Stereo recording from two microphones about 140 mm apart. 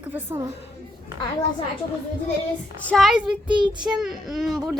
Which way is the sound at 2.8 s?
Centre (ahead or behind).